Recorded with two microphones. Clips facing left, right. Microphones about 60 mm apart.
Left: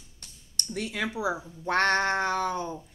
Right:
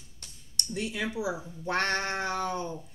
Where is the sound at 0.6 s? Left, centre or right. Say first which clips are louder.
Left 1 dB; left.